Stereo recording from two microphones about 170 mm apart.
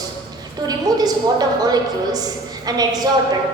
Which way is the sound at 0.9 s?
25° right (ahead or behind).